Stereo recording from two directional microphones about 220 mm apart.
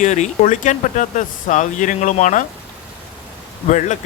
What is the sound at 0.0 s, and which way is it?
Speech, 35° left (ahead or behind).